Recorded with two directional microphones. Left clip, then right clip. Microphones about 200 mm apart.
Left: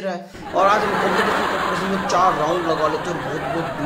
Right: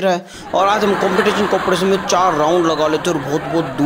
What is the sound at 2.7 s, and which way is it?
Speech, 50° right (ahead or behind).